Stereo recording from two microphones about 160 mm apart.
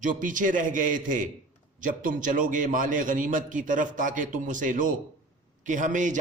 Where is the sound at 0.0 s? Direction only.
55° right (ahead or behind).